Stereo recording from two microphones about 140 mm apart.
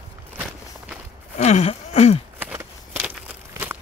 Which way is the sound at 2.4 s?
15° right (ahead or behind).